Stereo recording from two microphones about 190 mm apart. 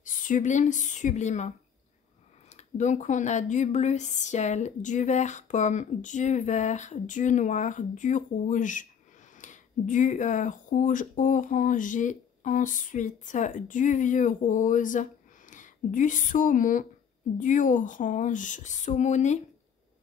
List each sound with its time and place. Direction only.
0.0 s speech: 45° left (ahead or behind)
2.5 s speech: 40° left (ahead or behind)